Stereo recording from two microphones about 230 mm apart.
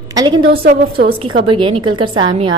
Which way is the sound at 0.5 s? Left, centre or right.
Right.